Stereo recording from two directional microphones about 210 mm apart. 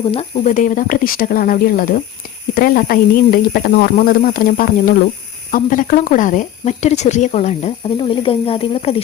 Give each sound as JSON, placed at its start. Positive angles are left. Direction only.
{"t": 0.0, "sound": "speech", "side_deg": 30}